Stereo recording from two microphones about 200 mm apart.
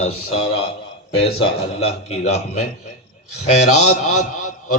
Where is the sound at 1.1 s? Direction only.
30° left (ahead or behind).